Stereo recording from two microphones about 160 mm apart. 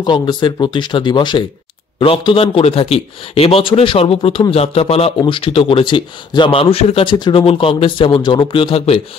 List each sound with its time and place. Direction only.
0.0 s a man's voice: 30° left (ahead or behind)